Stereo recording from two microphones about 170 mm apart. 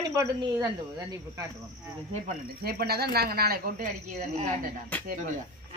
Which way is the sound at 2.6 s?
65° right (ahead or behind).